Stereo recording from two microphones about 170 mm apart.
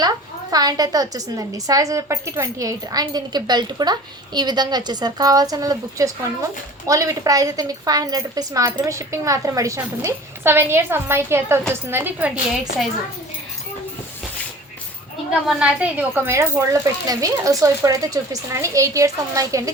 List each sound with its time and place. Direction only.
0.5 s a woman's voice: 20° right (ahead or behind)
15.3 s a woman's voice: 5° right (ahead or behind); by 19.7 s 20° right (ahead or behind)